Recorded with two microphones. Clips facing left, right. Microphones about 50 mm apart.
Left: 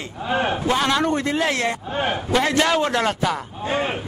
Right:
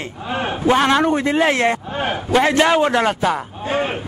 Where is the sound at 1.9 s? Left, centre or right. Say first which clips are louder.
Even; centre.